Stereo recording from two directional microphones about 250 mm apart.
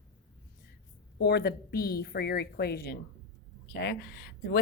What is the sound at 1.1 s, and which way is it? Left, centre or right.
A woman's voice, left.